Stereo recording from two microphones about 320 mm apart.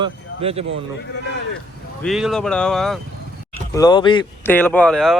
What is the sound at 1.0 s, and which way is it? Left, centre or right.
Speech, left.